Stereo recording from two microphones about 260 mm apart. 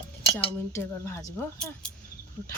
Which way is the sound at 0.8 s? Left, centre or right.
Centre.